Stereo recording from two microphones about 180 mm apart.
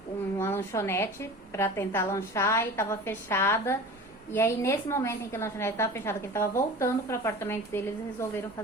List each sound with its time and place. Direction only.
0.3 s a woman's voice: 15° left (ahead or behind)